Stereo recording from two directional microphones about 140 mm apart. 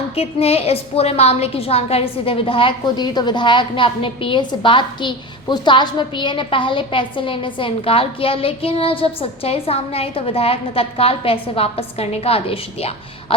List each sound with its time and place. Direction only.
0.2 s a woman's voice: 45° left (ahead or behind)